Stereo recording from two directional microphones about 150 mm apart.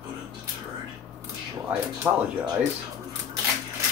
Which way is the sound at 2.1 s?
15° right (ahead or behind).